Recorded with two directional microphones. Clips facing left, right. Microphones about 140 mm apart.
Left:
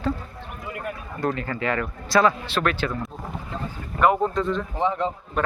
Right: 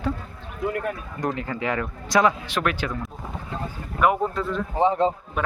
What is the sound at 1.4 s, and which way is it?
Speech, 15° right (ahead or behind).